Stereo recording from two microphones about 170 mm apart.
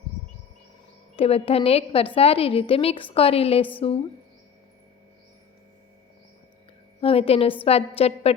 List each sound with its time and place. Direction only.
1.1 s a woman's voice: 35° left (ahead or behind)
7.0 s a woman's voice: 35° left (ahead or behind)